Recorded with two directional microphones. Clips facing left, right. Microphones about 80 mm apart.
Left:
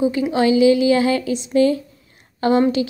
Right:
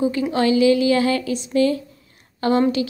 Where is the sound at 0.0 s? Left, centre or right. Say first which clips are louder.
Left 2 dB; centre.